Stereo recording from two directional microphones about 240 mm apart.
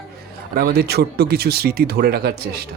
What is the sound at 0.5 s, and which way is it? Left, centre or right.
Speech, right.